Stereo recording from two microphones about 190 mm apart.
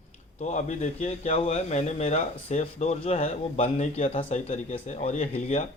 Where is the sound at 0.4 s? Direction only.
35° left (ahead or behind).